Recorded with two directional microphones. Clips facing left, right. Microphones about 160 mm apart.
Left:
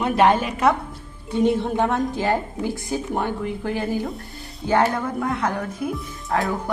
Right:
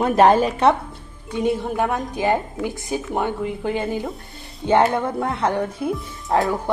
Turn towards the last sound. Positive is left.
turn(degrees=-30)  # may be behind; listen again after turning